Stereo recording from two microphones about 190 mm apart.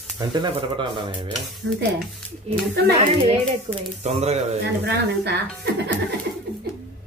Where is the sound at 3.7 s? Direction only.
35° right (ahead or behind).